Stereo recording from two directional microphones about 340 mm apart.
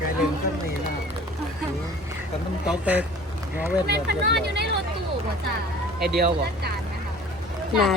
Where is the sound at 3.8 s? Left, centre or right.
Right.